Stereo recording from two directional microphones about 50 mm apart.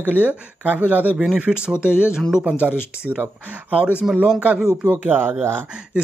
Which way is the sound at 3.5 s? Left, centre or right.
Right.